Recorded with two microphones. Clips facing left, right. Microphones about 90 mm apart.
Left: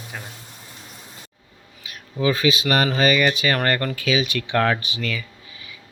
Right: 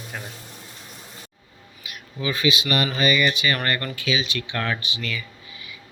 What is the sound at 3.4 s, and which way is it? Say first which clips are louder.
Speech: left 3 dB; 90° left.